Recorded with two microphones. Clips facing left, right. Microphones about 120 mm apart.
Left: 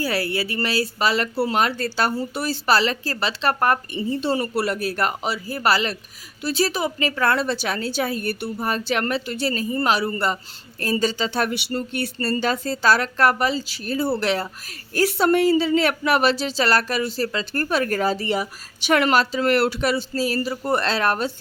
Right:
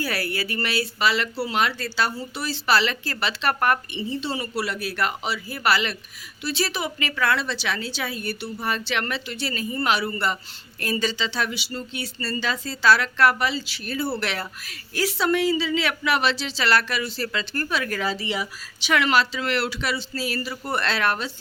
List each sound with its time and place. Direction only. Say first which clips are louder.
0.0 s speech: left 4 dB; 30° left (ahead or behind)
4.1 s speech: left 6 dB; 50° left (ahead or behind)
8.6 s speech: left 3 dB; 40° left (ahead or behind)
14.9 s speech: left 4 dB; 50° left (ahead or behind)